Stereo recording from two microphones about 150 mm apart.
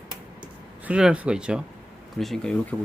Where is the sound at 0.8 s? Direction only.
5° right (ahead or behind).